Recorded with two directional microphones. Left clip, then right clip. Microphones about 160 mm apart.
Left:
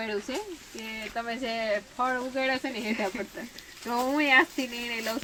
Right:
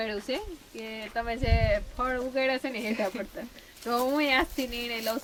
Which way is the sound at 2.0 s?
20° right (ahead or behind).